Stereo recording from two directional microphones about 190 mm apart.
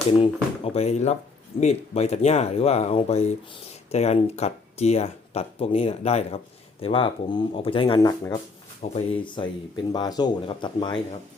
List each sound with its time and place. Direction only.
0.2 s speech: 30° left (ahead or behind)